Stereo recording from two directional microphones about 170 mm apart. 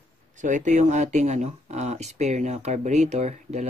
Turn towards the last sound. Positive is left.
turn(degrees=-40)  # may be behind; listen again after turning